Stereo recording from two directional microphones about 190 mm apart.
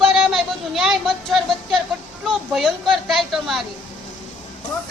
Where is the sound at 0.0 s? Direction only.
Centre (ahead or behind).